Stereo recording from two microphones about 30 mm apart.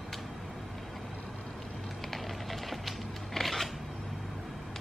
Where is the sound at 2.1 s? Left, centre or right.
Centre.